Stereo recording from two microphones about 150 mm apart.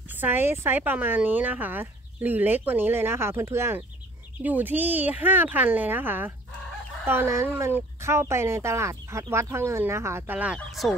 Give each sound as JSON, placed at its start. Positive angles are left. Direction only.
{"t": 0.1, "sound": "speech", "side_deg": -15}